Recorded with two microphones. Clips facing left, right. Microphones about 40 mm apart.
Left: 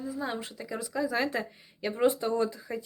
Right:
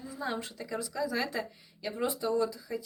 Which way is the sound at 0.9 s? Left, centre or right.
Left.